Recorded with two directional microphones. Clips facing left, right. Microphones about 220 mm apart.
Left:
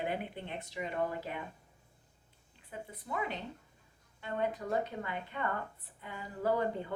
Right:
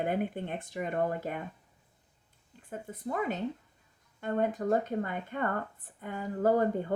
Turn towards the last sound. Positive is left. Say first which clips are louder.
# right 6 dB
turn(degrees=-45)  # may be behind; listen again after turning